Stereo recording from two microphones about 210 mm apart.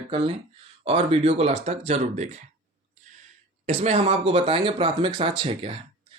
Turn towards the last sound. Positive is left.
turn(degrees=-25)  # may be behind; listen again after turning